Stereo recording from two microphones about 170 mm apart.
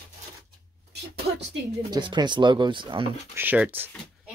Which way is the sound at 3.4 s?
10° right (ahead or behind).